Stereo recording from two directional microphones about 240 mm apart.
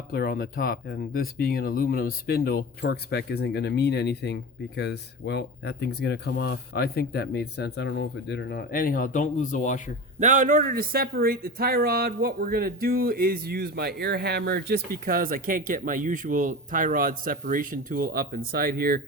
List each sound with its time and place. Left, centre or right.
0.1 s speech: left
10.2 s speech: right